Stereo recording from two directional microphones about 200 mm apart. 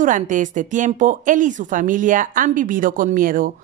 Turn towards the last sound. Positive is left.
turn(degrees=-45)  # may be behind; listen again after turning